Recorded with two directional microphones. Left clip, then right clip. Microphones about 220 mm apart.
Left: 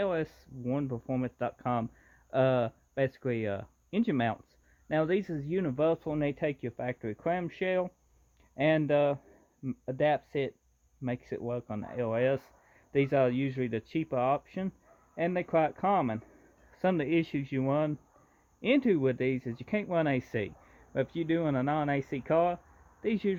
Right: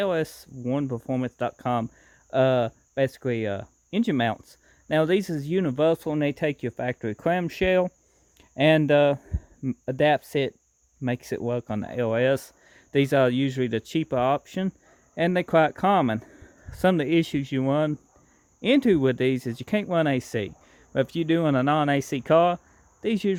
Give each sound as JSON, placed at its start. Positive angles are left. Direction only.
{"t": 0.0, "sound": "speech", "side_deg": -40}